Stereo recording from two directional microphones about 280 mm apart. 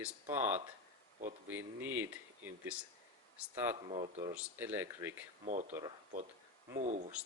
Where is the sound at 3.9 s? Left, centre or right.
Right.